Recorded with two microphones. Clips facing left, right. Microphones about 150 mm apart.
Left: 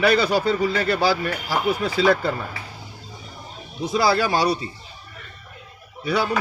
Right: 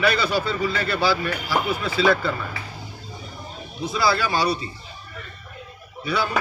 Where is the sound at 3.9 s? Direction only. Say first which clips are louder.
Left 3 dB; 45° left (ahead or behind).